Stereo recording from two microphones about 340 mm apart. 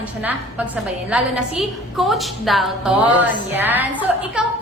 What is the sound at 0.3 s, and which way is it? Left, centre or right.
A woman's voice, centre.